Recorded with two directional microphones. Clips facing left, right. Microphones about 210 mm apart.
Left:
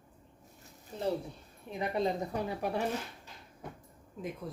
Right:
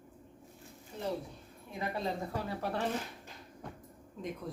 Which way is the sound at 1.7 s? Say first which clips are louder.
Left 4 dB; 20° left (ahead or behind).